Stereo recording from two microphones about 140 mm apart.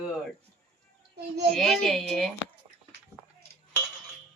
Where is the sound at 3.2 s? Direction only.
Centre (ahead or behind).